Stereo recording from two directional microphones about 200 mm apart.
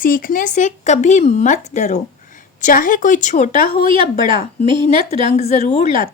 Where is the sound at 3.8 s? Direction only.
25° right (ahead or behind).